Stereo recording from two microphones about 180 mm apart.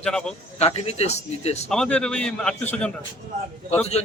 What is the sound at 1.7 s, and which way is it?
A man's voice, 5° left (ahead or behind).